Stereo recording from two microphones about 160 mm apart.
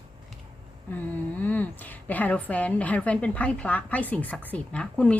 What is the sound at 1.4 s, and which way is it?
A woman's voice, 10° left (ahead or behind).